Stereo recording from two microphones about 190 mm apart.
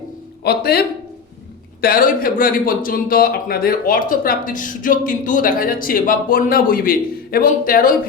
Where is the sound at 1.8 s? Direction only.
50° left (ahead or behind).